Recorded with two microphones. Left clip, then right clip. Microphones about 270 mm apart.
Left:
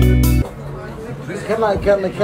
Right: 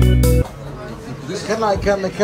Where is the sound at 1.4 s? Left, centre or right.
Right.